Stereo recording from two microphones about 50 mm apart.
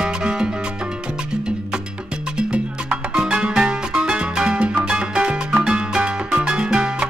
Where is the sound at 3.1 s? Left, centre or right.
Centre.